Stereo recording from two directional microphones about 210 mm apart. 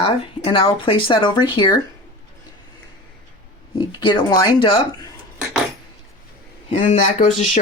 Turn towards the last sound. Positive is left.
turn(degrees=40)  # may be behind; listen again after turning